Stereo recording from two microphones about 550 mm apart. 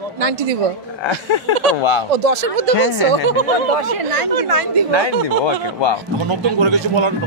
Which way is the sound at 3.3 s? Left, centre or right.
Right.